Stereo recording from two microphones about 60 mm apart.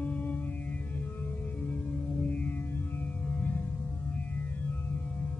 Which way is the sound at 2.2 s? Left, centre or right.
Left.